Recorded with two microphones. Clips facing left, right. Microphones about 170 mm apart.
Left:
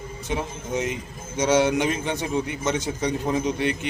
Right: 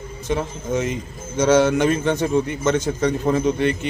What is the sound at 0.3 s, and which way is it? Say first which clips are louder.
A man's voice: right 5 dB; 15° left (ahead or behind).